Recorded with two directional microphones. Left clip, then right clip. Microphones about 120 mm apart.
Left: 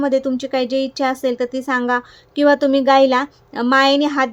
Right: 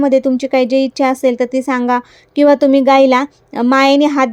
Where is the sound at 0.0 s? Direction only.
45° right (ahead or behind).